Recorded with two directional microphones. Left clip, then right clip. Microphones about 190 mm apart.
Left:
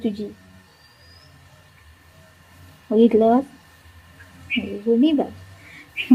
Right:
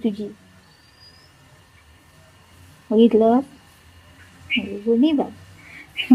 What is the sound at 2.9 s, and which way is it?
Speech, 20° right (ahead or behind).